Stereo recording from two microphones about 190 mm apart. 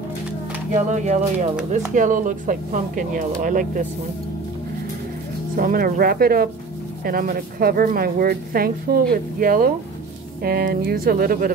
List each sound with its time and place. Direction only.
0.9 s speech: 40° right (ahead or behind)
5.6 s speech: 50° right (ahead or behind)